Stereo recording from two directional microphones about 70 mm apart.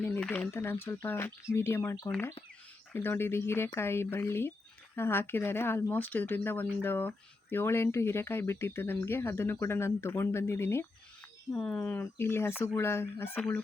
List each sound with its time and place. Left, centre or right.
0.5 s speech: left
11.5 s speech: centre
11.8 s speech: left